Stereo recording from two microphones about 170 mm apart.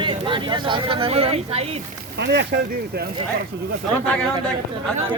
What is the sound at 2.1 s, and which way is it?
Speech, 90° right.